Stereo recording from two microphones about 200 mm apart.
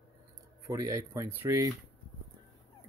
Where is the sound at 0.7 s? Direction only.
15° right (ahead or behind).